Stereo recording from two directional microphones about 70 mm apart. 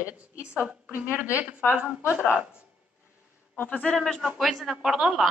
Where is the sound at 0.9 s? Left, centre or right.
Right.